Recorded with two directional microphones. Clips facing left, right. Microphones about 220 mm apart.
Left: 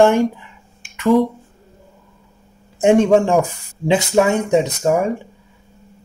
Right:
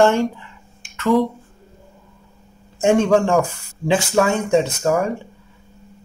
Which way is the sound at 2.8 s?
20° left (ahead or behind).